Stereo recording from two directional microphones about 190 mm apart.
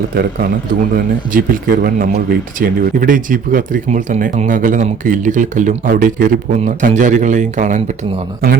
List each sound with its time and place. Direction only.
0.9 s speech: 45° right (ahead or behind)